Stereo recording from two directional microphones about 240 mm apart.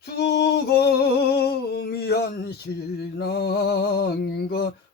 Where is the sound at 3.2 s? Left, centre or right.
Left.